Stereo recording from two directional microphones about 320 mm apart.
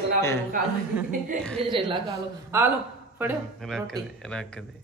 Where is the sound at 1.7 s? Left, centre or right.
Centre.